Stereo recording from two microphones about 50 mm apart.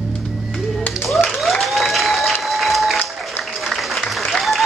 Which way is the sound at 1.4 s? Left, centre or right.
Centre.